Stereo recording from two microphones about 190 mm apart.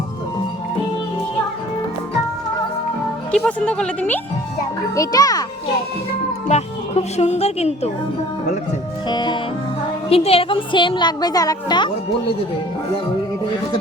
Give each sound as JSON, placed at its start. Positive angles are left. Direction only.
{"t": 3.3, "sound": "a woman's voice", "side_deg": 5}
{"t": 4.9, "sound": "a woman's voice", "side_deg": 20}
{"t": 6.5, "sound": "speech", "side_deg": 35}
{"t": 9.0, "sound": "a woman's voice", "side_deg": 25}